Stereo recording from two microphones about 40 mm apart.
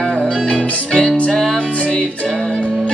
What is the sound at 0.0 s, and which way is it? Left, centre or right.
Music, left.